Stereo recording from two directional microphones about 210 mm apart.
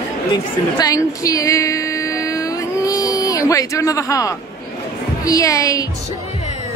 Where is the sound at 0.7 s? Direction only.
15° left (ahead or behind).